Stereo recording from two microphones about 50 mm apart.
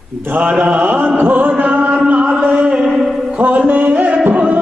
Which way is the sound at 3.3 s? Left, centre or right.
Right.